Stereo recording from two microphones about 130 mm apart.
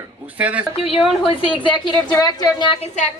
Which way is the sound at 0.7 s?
50° left (ahead or behind).